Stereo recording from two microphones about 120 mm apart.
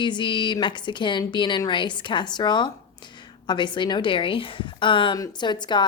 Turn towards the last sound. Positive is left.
turn(degrees=40)  # may be behind; listen again after turning